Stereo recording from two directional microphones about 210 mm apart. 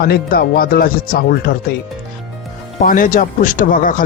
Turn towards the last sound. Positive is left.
turn(degrees=40)  # may be behind; listen again after turning